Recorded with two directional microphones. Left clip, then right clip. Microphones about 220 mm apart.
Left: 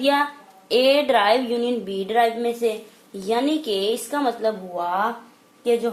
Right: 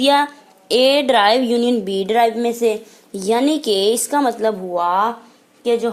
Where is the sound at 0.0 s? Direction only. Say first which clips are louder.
Right 5 dB; 35° right (ahead or behind).